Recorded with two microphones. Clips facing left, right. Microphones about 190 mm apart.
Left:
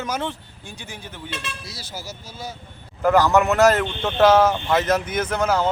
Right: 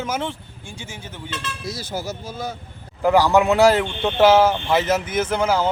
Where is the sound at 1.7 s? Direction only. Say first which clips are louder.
Right 8 dB; 50° right (ahead or behind).